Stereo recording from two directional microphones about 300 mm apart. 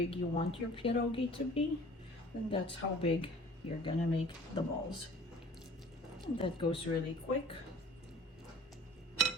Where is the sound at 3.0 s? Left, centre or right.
Centre.